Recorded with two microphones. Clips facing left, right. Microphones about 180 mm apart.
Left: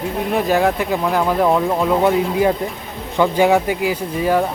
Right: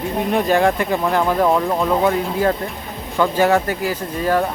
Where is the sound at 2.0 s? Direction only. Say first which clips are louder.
Left 2 dB; 15° left (ahead or behind).